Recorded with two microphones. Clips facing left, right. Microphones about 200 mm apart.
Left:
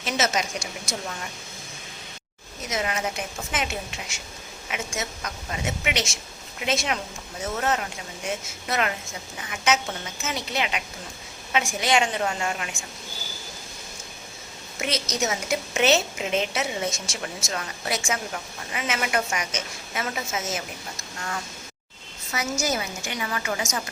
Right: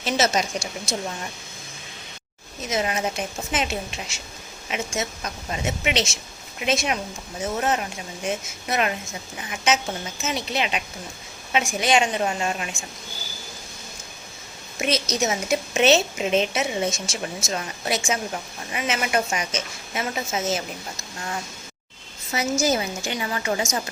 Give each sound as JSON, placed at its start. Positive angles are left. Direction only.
{"t": 0.0, "sound": "speech", "side_deg": -30}
{"t": 2.6, "sound": "a woman's voice", "side_deg": -25}
{"t": 14.8, "sound": "a woman's voice", "side_deg": -20}
{"t": 22.3, "sound": "a woman's voice", "side_deg": -25}